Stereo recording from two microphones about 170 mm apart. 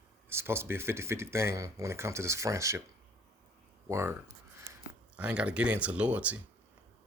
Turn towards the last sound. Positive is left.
turn(degrees=-10)  # may be behind; listen again after turning